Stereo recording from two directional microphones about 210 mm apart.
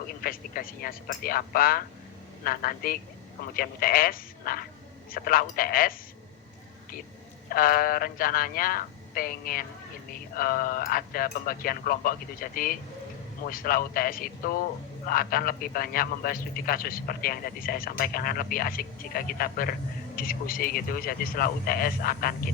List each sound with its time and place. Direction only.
0.2 s a man's voice: 40° left (ahead or behind)
7.5 s a man's voice: 45° left (ahead or behind)